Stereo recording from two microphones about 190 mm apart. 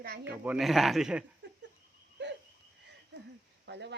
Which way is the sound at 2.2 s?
70° right (ahead or behind).